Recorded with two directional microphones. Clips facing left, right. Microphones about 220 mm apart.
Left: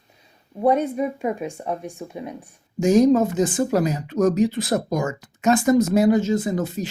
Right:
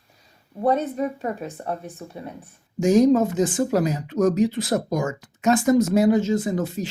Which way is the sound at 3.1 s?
40° left (ahead or behind).